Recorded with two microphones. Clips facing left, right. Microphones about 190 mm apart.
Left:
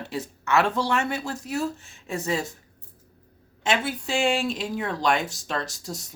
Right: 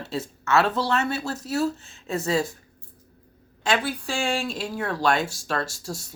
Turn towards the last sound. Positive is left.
turn(degrees=20)  # may be behind; listen again after turning